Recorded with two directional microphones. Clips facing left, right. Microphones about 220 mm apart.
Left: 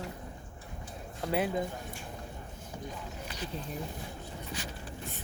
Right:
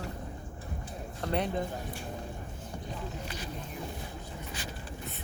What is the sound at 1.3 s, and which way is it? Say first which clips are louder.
Speech: left 1 dB; 5° left (ahead or behind).